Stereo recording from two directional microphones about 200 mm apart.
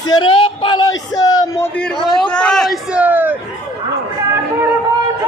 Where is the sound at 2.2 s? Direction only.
5° left (ahead or behind).